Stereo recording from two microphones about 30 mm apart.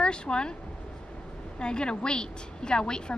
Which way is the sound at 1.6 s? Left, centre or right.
Left.